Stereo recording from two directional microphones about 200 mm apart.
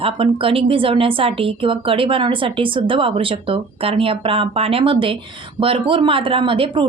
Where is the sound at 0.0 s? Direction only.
25° right (ahead or behind).